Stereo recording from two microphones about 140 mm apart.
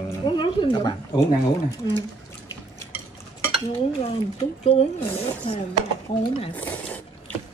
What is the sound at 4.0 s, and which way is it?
Speech, 45° left (ahead or behind).